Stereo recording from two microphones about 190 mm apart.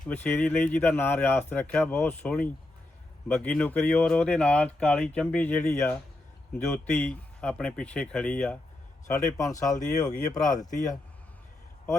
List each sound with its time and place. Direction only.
0.1 s speech: 10° left (ahead or behind)
9.1 s speech: 15° left (ahead or behind)
9.7 s speech: 40° left (ahead or behind)